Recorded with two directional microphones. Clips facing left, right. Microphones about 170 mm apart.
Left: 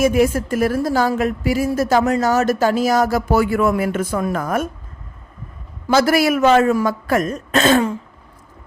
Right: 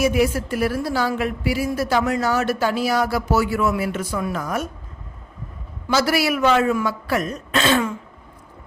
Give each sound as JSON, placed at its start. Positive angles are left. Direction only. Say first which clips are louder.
{"t": 0.0, "sound": "a woman's voice", "louder": "left 3 dB", "side_deg": 45}
{"t": 5.9, "sound": "a woman's voice", "louder": "left 5 dB", "side_deg": 50}